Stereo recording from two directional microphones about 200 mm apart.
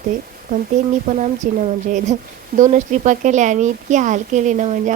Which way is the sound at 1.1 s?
35° right (ahead or behind).